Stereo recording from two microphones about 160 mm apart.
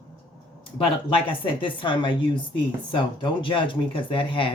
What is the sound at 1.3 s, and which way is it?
Speech, 30° left (ahead or behind).